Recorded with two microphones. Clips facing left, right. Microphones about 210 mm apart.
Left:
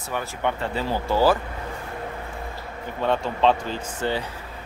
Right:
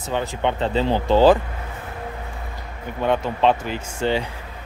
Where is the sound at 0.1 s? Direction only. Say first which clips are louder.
Right 4 dB; 20° right (ahead or behind).